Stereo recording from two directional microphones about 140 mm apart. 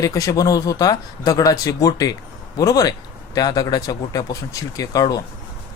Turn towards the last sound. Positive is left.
turn(degrees=25)  # may be behind; listen again after turning